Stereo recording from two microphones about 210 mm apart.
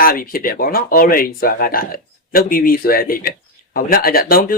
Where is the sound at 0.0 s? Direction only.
45° left (ahead or behind).